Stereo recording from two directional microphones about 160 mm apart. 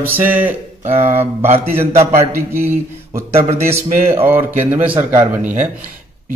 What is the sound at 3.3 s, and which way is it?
Speech, 45° right (ahead or behind).